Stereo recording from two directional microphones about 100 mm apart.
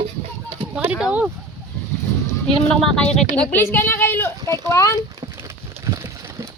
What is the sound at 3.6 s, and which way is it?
Speech, 20° left (ahead or behind).